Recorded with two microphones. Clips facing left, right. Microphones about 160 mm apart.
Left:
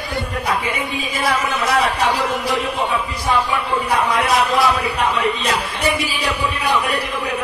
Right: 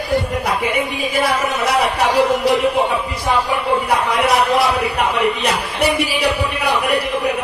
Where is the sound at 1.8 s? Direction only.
65° right (ahead or behind).